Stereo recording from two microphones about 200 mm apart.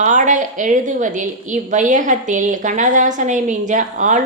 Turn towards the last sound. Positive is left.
turn(degrees=-40)  # may be behind; listen again after turning